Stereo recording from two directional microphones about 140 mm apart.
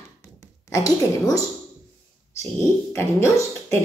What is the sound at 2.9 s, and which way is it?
Speech, 20° left (ahead or behind).